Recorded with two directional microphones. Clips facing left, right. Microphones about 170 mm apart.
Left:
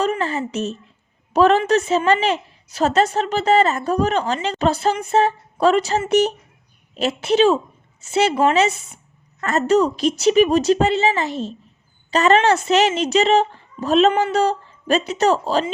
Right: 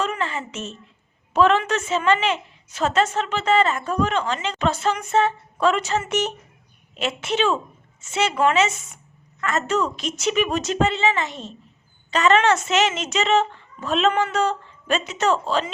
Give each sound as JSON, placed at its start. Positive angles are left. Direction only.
{"t": 0.0, "sound": "a woman's voice", "side_deg": 40}